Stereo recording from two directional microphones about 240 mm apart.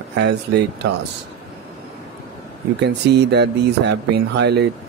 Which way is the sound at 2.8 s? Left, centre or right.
Right.